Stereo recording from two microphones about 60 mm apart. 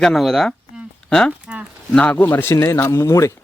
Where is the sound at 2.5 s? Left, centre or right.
Left.